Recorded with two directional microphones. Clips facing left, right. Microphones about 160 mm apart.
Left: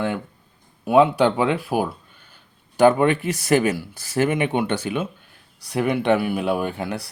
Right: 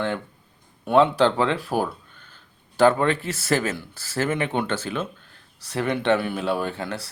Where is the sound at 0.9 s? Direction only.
10° left (ahead or behind).